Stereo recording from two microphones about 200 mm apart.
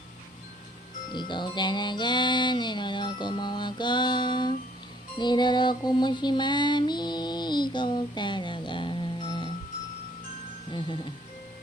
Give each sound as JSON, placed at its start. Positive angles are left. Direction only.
{"t": 1.3, "sound": "music", "side_deg": 20}
{"t": 10.7, "sound": "music", "side_deg": 25}